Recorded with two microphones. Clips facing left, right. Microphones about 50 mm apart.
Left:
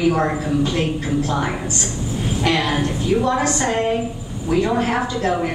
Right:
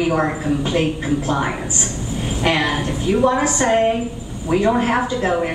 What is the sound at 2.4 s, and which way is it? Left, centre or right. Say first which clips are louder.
A woman's voice: right 1 dB; centre.